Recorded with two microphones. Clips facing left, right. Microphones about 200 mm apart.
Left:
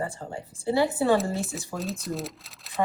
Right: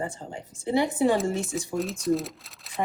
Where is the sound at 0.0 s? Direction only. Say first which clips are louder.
Left 1 dB; 20° right (ahead or behind).